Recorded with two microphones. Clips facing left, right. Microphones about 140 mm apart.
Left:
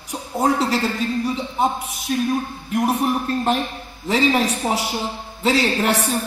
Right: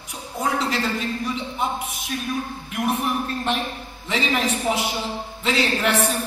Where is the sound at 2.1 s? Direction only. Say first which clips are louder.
Left 9 dB; 35° left (ahead or behind).